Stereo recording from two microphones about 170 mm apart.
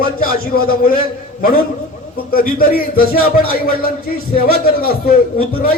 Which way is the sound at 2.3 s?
60° left (ahead or behind).